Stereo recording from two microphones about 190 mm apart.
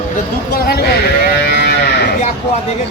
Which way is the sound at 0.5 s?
55° left (ahead or behind).